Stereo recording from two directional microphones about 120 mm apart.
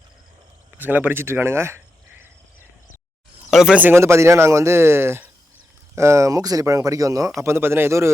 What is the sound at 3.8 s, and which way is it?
Speech, 20° right (ahead or behind).